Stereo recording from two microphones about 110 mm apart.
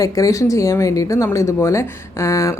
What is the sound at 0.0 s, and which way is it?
Speech, 30° left (ahead or behind).